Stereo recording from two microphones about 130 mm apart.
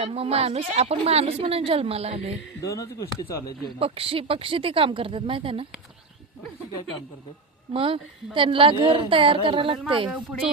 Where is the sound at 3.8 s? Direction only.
45° right (ahead or behind).